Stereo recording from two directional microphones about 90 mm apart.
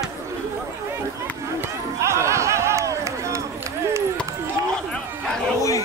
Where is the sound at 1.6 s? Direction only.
30° right (ahead or behind).